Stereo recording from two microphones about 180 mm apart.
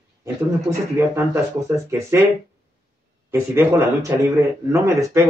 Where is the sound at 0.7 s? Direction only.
10° right (ahead or behind).